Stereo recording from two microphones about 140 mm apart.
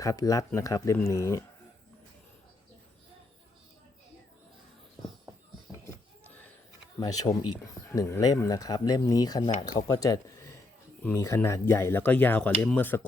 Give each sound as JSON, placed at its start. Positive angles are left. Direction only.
{"t": 0.0, "sound": "speech", "side_deg": 25}
{"t": 6.2, "sound": "a sound", "side_deg": 10}
{"t": 7.0, "sound": "speech", "side_deg": 25}